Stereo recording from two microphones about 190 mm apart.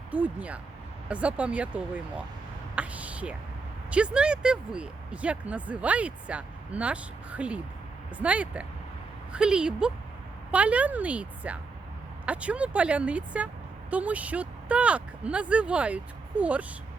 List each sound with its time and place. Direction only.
0.1 s speech: 5° right (ahead or behind)
2.7 s a sound: 5° right (ahead or behind)
3.9 s a woman's voice: 5° right (ahead or behind)